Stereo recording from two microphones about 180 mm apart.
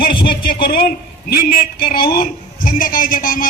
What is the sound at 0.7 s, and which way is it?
A man's voice, 55° left (ahead or behind).